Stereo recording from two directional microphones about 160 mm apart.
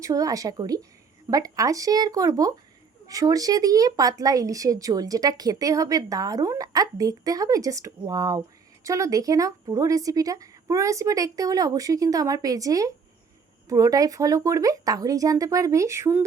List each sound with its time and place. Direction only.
0.0 s speech: 20° right (ahead or behind)